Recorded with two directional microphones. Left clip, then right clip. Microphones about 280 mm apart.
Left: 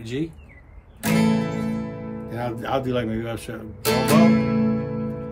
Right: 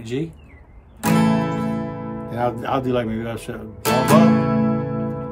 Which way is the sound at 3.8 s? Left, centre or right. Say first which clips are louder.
Right 3 dB; right.